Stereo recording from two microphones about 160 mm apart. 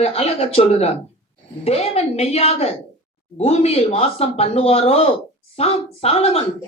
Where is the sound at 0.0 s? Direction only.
40° left (ahead or behind).